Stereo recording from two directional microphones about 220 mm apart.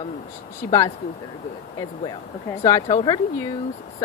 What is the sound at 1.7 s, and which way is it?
Speech, 20° left (ahead or behind).